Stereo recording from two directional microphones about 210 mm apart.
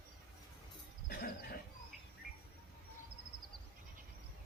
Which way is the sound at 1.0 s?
45° left (ahead or behind).